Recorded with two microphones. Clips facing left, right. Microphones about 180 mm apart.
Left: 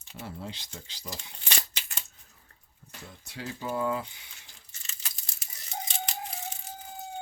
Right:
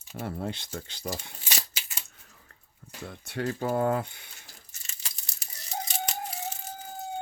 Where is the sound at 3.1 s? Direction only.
65° right (ahead or behind).